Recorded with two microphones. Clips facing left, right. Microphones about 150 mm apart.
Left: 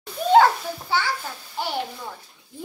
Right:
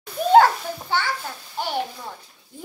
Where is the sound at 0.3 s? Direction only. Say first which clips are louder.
Right 1 dB; 5° left (ahead or behind).